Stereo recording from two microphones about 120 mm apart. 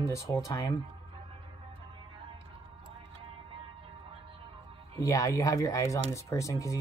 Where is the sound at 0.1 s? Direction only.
30° left (ahead or behind).